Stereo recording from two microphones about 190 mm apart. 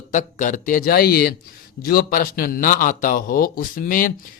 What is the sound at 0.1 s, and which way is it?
Speech, 40° left (ahead or behind).